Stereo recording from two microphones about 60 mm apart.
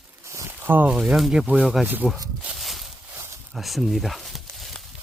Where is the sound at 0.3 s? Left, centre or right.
Right.